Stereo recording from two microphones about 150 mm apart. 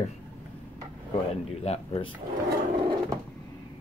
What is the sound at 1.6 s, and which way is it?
Speech, 40° left (ahead or behind).